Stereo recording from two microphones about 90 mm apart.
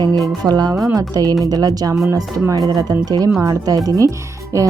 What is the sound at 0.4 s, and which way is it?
Speech, 50° right (ahead or behind).